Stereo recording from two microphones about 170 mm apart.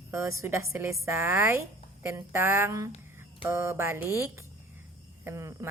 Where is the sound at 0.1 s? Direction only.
15° right (ahead or behind).